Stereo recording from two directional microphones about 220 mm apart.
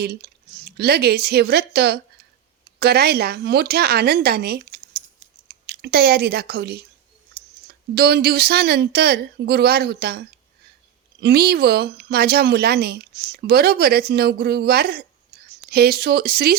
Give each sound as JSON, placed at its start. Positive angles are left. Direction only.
{"t": 0.0, "sound": "speech", "side_deg": -45}
{"t": 7.3, "sound": "a sound", "side_deg": -45}
{"t": 7.7, "sound": "speech", "side_deg": -45}